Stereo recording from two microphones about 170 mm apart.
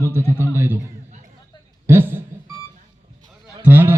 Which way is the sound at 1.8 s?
15° right (ahead or behind).